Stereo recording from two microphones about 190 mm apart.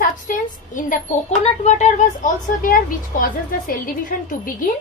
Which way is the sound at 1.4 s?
35° left (ahead or behind).